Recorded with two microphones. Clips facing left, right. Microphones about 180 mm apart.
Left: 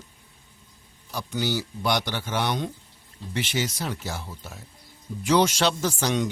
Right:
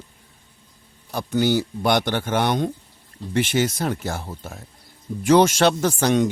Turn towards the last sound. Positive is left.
turn(degrees=-55)  # may be behind; listen again after turning